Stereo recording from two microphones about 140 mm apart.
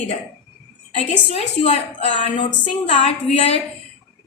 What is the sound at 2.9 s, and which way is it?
Speech, 40° left (ahead or behind).